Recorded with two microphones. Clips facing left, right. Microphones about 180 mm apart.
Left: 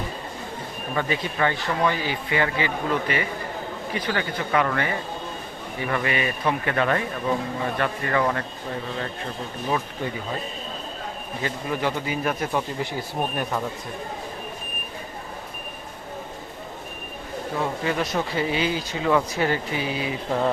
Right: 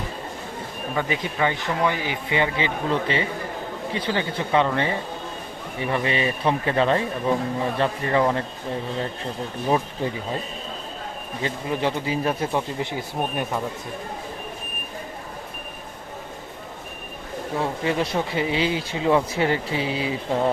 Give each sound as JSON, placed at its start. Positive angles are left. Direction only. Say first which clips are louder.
{"t": 0.9, "sound": "speech", "louder": "even", "side_deg": -15}
{"t": 9.6, "sound": "speech", "louder": "right 4 dB", "side_deg": -30}
{"t": 11.4, "sound": "speech", "louder": "right 2 dB", "side_deg": -25}
{"t": 17.6, "sound": "speech", "louder": "right 2 dB", "side_deg": -25}